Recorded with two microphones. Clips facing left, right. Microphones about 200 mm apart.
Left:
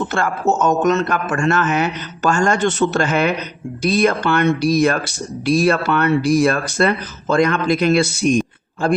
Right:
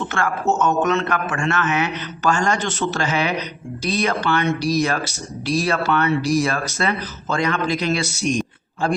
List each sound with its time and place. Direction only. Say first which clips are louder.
0.6 s a man's voice: left 4 dB; 40° left (ahead or behind); by 8.4 s 55° left (ahead or behind)